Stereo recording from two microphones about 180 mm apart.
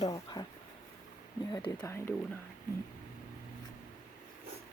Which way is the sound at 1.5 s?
20° left (ahead or behind).